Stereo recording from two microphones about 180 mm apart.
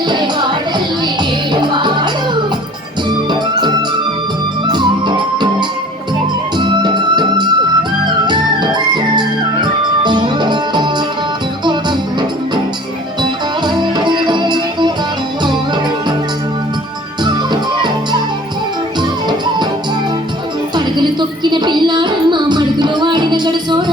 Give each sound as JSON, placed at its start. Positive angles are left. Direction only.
{"t": 0.1, "sound": "music", "side_deg": -25}
{"t": 1.7, "sound": "music", "side_deg": -25}
{"t": 13.7, "sound": "music", "side_deg": -25}
{"t": 17.2, "sound": "music", "side_deg": -25}
{"t": 20.7, "sound": "music", "side_deg": -25}